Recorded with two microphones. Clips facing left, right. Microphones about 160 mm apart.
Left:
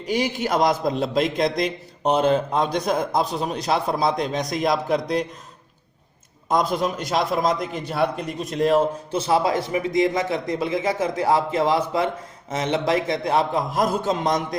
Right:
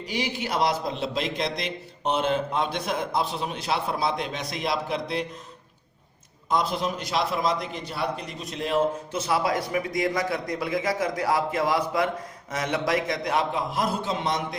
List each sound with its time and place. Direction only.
0.1 s a man's voice: 45° left (ahead or behind)
6.5 s a man's voice: 45° left (ahead or behind)